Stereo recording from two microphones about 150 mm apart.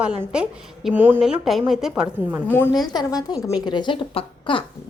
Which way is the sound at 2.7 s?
25° left (ahead or behind).